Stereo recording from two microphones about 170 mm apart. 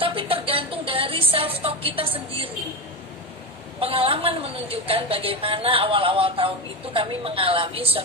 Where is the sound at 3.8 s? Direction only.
35° right (ahead or behind).